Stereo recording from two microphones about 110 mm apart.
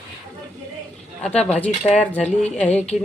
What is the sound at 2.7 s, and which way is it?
Speech, 85° left.